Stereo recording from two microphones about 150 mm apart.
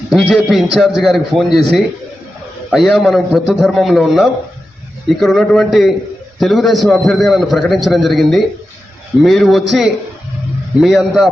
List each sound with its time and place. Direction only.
0.1 s a man's voice: centre (ahead or behind)